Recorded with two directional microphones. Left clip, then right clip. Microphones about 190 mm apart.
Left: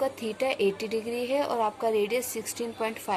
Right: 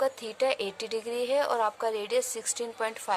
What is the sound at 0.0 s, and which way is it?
Speech, 45° right (ahead or behind).